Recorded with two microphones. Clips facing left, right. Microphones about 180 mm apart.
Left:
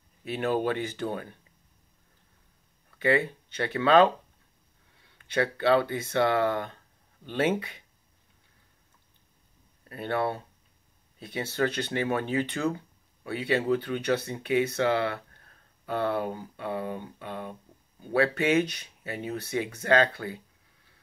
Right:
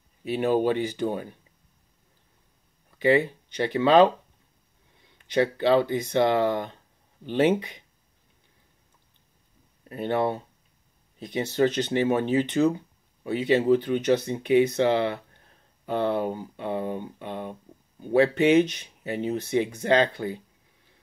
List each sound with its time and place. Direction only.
0.3 s speech: 15° right (ahead or behind)
3.0 s speech: 15° right (ahead or behind)
9.8 s speech: 20° right (ahead or behind)